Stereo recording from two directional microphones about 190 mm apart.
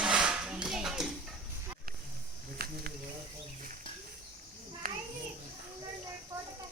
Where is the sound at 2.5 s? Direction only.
50° right (ahead or behind).